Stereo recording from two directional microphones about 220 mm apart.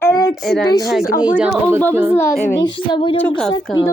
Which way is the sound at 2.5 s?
20° left (ahead or behind).